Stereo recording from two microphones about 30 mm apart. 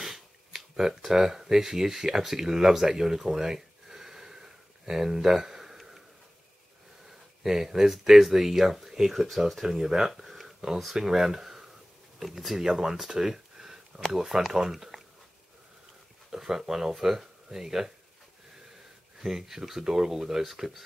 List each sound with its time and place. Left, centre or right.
0.0 s a sound: centre
7.1 s speech: centre
9.1 s speech: centre
9.6 s speech: centre
10.1 s a sound: centre
11.0 s speech: centre
12.7 s a sound: centre
14.1 s speech: centre
16.3 s speech: centre
19.1 s speech: centre